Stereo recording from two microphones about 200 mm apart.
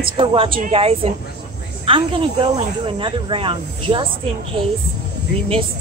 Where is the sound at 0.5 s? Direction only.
40° right (ahead or behind).